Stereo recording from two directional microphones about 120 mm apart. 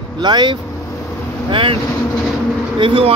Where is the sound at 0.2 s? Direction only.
40° right (ahead or behind).